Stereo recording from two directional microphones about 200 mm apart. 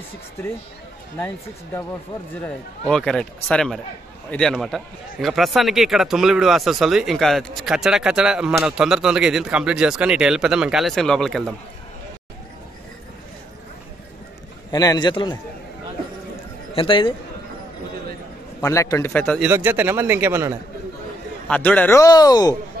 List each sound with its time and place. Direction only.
2.3 s speech: 5° left (ahead or behind)
14.7 s a man's voice: 20° left (ahead or behind)
16.7 s a man's voice: 25° left (ahead or behind)
18.6 s a man's voice: 15° left (ahead or behind)
19.4 s a man's voice: 10° right (ahead or behind)
21.5 s a man's voice: 5° left (ahead or behind)